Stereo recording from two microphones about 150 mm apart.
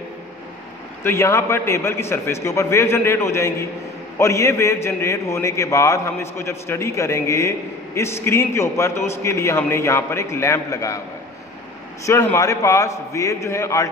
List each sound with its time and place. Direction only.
1.0 s a man's voice: 15° left (ahead or behind)
12.1 s a man's voice: 15° left (ahead or behind)